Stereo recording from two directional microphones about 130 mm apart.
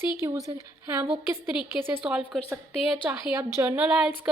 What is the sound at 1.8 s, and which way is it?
Speech, 10° right (ahead or behind).